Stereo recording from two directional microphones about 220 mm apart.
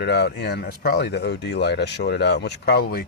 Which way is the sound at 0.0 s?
50° left (ahead or behind).